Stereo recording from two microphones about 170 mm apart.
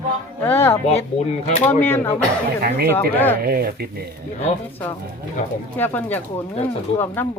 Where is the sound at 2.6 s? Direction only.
65° right (ahead or behind).